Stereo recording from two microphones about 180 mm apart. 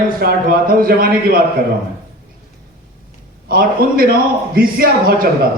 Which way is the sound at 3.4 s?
55° right (ahead or behind).